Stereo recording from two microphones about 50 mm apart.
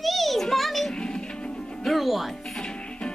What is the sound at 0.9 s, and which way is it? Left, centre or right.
Music, centre.